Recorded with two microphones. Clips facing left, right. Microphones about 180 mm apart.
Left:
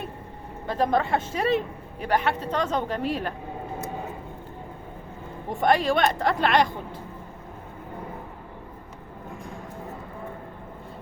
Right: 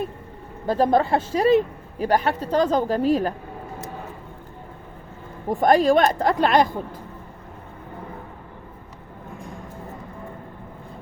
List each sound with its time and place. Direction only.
0.7 s speech: 35° right (ahead or behind)
5.5 s speech: 40° right (ahead or behind)